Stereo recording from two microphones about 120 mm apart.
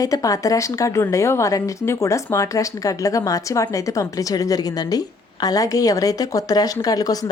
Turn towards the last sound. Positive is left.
turn(degrees=30)  # may be behind; listen again after turning